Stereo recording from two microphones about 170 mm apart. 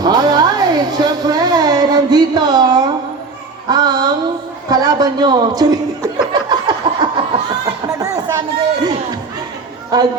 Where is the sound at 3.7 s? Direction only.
25° right (ahead or behind).